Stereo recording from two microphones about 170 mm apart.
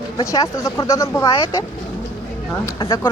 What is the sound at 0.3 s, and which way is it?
Speech, 15° left (ahead or behind).